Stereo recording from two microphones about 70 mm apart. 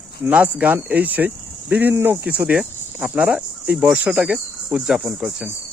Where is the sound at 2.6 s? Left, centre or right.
Centre.